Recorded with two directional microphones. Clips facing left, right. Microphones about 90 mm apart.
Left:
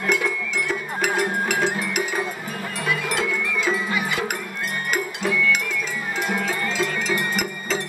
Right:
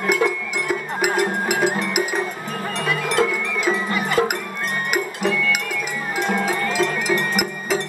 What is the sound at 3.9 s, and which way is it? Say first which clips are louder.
Cowbell: right 5 dB; 45° right (ahead or behind).